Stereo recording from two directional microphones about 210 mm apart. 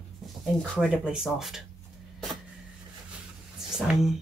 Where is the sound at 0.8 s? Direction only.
5° right (ahead or behind).